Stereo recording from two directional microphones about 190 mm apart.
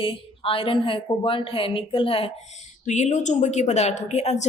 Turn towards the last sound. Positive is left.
turn(degrees=35)  # may be behind; listen again after turning